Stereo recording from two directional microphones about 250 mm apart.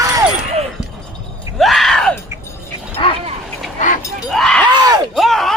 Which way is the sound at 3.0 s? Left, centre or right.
Centre.